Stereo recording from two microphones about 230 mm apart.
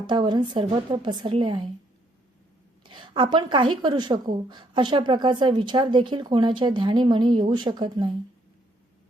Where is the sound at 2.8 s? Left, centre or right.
Centre.